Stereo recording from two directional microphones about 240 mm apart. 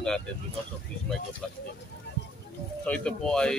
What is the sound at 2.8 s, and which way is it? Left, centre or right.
Speech, centre.